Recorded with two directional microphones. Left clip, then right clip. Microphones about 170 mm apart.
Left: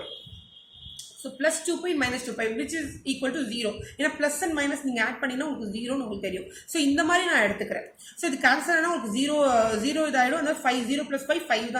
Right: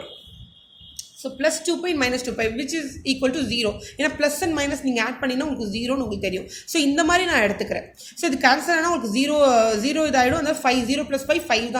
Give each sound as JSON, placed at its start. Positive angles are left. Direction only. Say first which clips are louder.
{"t": 1.4, "sound": "a woman's voice", "louder": "right 4 dB", "side_deg": -40}